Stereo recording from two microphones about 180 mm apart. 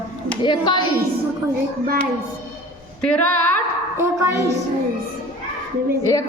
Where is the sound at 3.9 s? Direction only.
15° right (ahead or behind).